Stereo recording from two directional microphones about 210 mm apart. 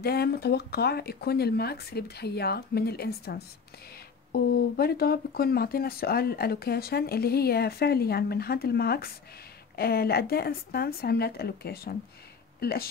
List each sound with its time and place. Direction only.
0.0 s speech: 50° left (ahead or behind)